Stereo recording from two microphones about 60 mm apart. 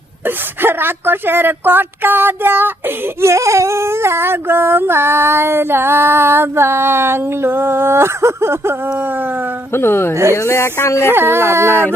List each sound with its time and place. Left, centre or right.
0.3 s a woman's voice: right
3.2 s a sound: right
9.0 s a woman's voice: right
9.7 s speech: left
10.3 s speech: left
11.1 s a woman's voice: right